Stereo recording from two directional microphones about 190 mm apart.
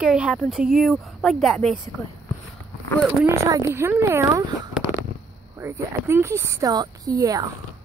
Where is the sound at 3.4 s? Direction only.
15° right (ahead or behind).